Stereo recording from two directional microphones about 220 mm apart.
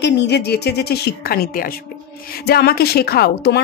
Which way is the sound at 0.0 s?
50° left (ahead or behind).